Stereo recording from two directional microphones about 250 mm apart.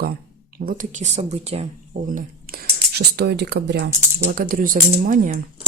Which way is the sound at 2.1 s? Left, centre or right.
Right.